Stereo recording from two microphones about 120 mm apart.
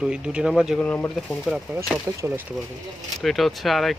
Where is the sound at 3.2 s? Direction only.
Centre (ahead or behind).